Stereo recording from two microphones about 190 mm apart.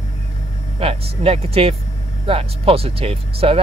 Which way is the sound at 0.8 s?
30° right (ahead or behind).